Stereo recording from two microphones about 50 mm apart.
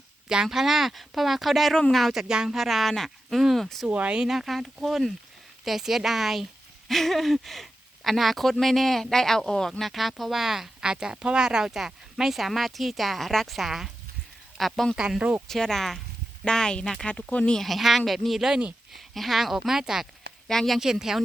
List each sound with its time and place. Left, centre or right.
0.4 s speech: centre
2.2 s speech: centre
3.8 s speech: right
4.2 s speech: centre
15.0 s speech: centre
15.4 s speech: centre
17.6 s speech: centre
20.5 s speech: centre
20.7 s speech: centre